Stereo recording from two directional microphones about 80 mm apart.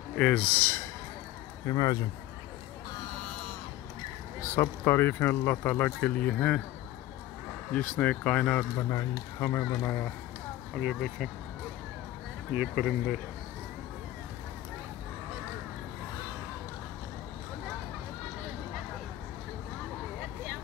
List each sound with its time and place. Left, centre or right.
0.2 s speech: centre
1.7 s speech: left
4.6 s speech: left; by 6.6 s centre
7.7 s speech: centre
8.7 s speech: left
9.7 s speech: left
10.8 s speech: centre
12.5 s speech: centre
12.8 s speech: centre